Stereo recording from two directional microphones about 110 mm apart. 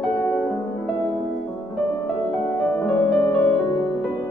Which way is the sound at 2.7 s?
15° left (ahead or behind).